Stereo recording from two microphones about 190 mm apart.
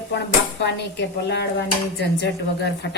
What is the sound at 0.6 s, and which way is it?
Speech, 65° left (ahead or behind).